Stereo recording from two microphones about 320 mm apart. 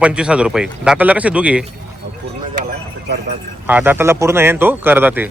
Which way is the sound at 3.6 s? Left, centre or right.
Centre.